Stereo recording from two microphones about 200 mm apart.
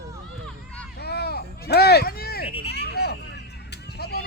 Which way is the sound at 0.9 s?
55° left (ahead or behind).